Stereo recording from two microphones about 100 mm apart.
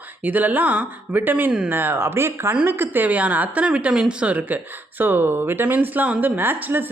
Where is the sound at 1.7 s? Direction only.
20° right (ahead or behind).